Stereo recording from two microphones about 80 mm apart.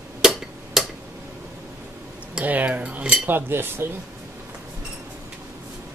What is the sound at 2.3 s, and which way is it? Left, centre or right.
Speech, centre.